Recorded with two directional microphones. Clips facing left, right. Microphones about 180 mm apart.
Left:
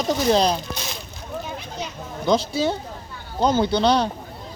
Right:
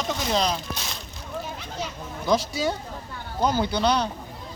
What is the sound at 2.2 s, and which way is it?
Speech, 25° left (ahead or behind).